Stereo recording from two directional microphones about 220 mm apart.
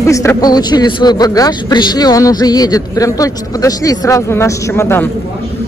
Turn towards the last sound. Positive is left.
turn(degrees=10)  # may be behind; listen again after turning